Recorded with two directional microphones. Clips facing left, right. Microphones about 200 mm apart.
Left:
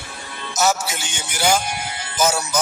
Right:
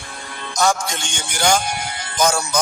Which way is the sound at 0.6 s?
5° left (ahead or behind).